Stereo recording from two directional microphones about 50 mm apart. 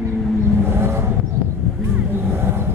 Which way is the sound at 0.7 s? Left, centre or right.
Right.